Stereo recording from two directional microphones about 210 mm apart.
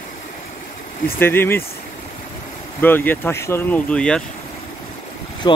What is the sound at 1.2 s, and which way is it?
Speech, 10° left (ahead or behind).